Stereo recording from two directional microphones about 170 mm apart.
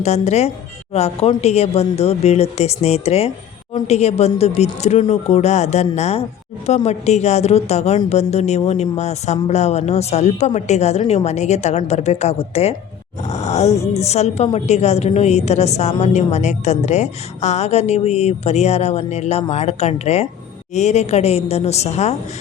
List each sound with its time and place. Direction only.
0.0 s a woman's voice: 40° left (ahead or behind)
13.2 s groan: 40° left (ahead or behind)
13.9 s a woman's voice: 40° left (ahead or behind)